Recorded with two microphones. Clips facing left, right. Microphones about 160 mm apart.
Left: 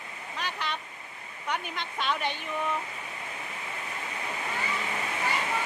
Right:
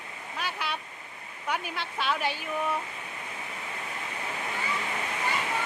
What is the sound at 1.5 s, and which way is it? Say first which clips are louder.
A woman's voice: right 1 dB; 5° right (ahead or behind).